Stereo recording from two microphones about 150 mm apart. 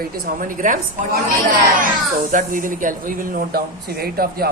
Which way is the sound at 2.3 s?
60° right (ahead or behind).